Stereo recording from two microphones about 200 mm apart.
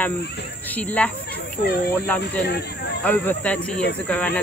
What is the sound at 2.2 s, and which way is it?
Speech, 55° left (ahead or behind).